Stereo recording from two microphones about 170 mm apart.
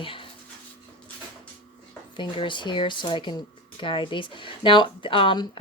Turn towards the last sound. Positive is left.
turn(degrees=30)  # may be behind; listen again after turning